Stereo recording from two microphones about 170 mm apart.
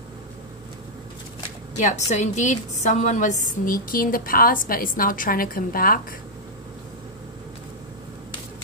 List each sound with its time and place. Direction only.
1.8 s a woman's voice: 45° left (ahead or behind)